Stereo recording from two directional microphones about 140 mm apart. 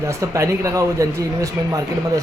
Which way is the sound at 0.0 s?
20° right (ahead or behind).